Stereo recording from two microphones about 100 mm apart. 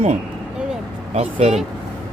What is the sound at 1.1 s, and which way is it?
Speech, 85° right.